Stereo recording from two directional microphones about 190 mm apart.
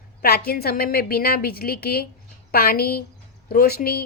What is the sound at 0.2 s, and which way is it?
Speech, 55° left (ahead or behind).